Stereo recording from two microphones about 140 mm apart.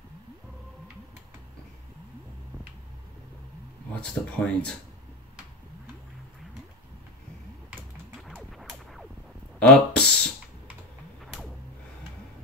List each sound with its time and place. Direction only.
3.9 s speech: 5° left (ahead or behind)
8.5 s music: centre (ahead or behind)
9.6 s a sound: 10° left (ahead or behind)